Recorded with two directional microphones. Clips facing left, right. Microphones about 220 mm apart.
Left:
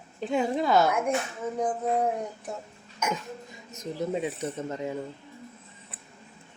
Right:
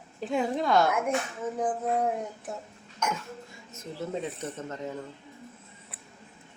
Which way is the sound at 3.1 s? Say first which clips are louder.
Left 3 dB; 15° left (ahead or behind).